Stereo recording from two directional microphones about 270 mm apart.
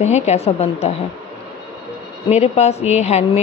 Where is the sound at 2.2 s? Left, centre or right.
Left.